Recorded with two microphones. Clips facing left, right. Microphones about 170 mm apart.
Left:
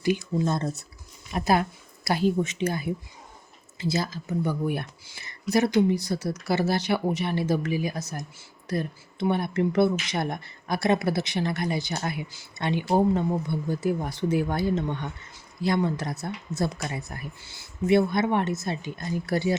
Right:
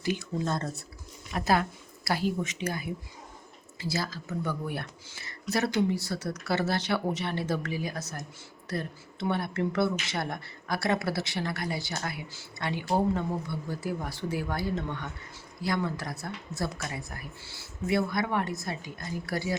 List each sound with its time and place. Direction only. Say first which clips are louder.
0.0 s speech: left 6 dB; 15° left (ahead or behind)